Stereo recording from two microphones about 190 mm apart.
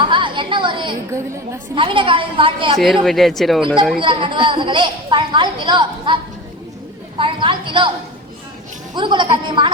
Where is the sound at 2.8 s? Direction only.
Centre (ahead or behind).